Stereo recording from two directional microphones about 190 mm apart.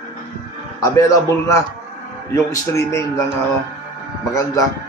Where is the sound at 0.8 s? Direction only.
15° left (ahead or behind).